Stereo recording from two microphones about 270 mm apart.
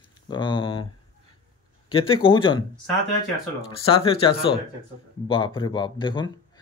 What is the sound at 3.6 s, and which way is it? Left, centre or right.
Speech, left.